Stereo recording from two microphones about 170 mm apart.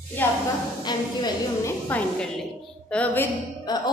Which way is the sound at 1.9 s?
5° left (ahead or behind).